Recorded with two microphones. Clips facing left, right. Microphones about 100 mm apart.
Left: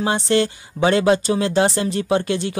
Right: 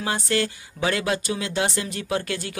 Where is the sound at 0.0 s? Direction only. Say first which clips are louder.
Left 6 dB; 25° left (ahead or behind).